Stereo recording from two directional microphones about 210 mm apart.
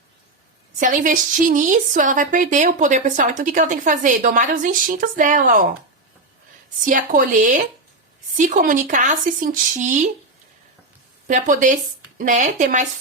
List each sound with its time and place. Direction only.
0.8 s a woman's voice: 40° right (ahead or behind)
6.8 s a woman's voice: 40° right (ahead or behind)
11.3 s a woman's voice: 35° right (ahead or behind)